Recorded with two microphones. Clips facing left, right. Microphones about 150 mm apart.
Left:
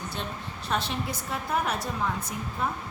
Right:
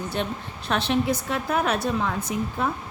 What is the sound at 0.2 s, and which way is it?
Speech, 65° right (ahead or behind).